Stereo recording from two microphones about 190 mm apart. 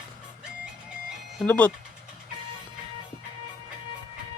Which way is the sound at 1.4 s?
5° left (ahead or behind).